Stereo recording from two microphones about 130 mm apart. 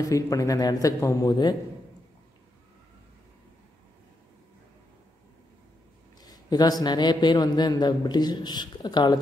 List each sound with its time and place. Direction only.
0.0 s a man's voice: 25° left (ahead or behind)
6.2 s a sound: 30° left (ahead or behind)
6.8 s a man's voice: 35° left (ahead or behind)